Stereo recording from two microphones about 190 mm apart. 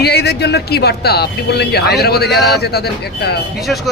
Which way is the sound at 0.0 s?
55° left (ahead or behind).